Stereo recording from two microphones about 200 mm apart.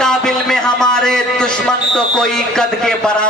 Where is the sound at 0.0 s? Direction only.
5° left (ahead or behind).